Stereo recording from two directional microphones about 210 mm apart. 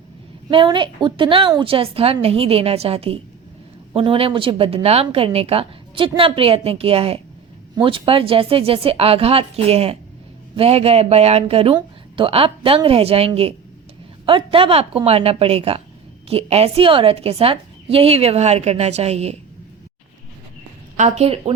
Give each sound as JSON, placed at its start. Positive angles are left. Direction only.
{"t": 0.5, "sound": "speech", "side_deg": -25}
{"t": 20.9, "sound": "speech", "side_deg": -30}